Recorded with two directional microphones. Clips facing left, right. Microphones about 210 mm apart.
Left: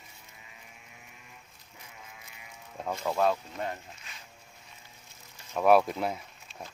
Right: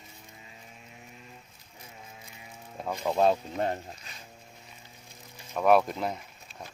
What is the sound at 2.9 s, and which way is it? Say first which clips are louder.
Speech: right 3 dB; 20° right (ahead or behind).